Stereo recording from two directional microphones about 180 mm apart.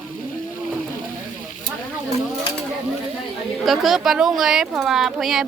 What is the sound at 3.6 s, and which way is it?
Speech, centre (ahead or behind).